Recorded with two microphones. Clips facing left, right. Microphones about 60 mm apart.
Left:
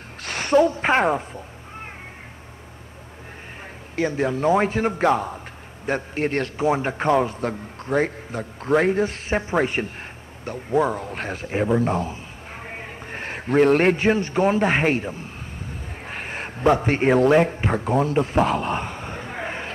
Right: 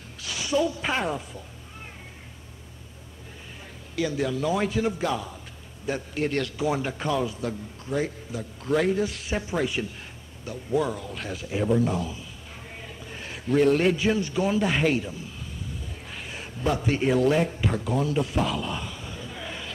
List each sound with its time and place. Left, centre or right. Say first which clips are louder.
0.2 s cat: left 7 dB; left
3.9 s a man's voice: left 4 dB; left